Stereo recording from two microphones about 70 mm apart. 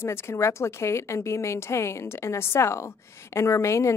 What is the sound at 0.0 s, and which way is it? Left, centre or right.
A woman's voice, left.